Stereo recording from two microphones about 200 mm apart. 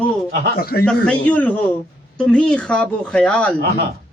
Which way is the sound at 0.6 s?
50° left (ahead or behind).